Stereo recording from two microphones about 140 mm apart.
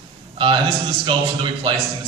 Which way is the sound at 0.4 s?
40° right (ahead or behind).